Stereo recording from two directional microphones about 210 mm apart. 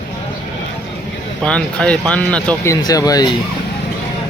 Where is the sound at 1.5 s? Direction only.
5° left (ahead or behind).